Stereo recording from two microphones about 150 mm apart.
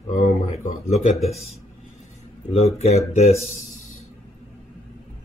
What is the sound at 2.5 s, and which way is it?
Speech, 45° left (ahead or behind).